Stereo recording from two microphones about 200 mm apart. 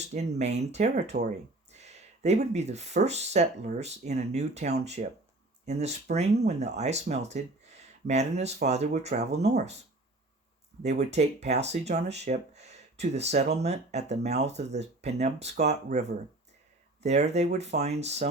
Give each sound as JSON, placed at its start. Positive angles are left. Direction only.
{"t": 0.0, "sound": "speech", "side_deg": -35}
{"t": 10.8, "sound": "speech", "side_deg": -35}